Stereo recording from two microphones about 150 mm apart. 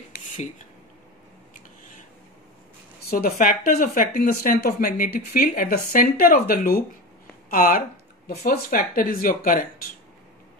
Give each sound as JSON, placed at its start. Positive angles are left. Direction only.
{"t": 3.1, "sound": "speech", "side_deg": 75}